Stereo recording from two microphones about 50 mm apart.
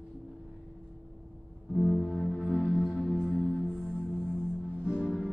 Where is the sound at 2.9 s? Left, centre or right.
Left.